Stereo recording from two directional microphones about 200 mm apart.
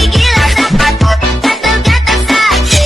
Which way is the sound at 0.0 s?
Centre (ahead or behind).